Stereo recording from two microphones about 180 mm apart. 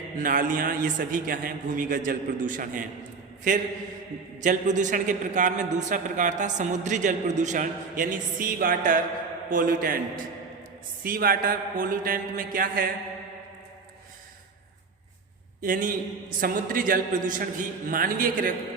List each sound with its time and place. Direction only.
0.2 s a man's voice: 50° right (ahead or behind)
15.6 s a man's voice: 50° right (ahead or behind)